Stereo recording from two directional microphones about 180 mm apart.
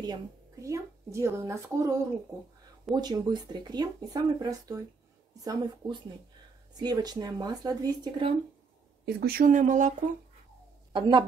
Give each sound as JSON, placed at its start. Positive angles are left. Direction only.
{"t": 0.0, "sound": "speech", "side_deg": -20}
{"t": 3.0, "sound": "speech", "side_deg": -25}
{"t": 9.0, "sound": "speech", "side_deg": -60}
{"t": 10.9, "sound": "a woman's voice", "side_deg": -25}